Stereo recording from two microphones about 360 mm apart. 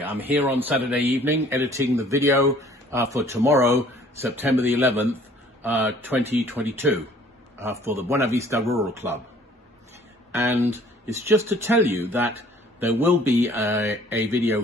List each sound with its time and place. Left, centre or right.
0.0 s speech: centre
10.4 s speech: centre